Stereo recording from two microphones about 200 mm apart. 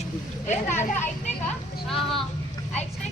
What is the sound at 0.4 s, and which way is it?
Speech, 35° left (ahead or behind).